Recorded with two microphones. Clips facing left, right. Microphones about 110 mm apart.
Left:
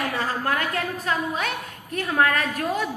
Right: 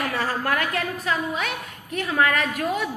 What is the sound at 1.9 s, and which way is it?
Speech, 40° left (ahead or behind).